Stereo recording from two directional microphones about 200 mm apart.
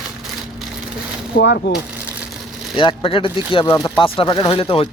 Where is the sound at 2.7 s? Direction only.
25° left (ahead or behind).